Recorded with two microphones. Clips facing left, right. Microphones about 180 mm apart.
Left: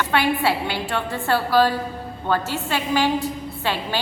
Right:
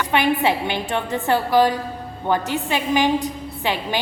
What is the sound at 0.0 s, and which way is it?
A woman's voice, 15° right (ahead or behind).